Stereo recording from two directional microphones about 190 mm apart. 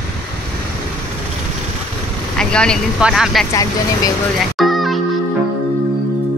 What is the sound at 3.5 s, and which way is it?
Speech, 20° left (ahead or behind).